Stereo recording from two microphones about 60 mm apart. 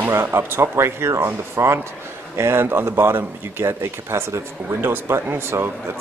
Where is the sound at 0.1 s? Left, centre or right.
Right.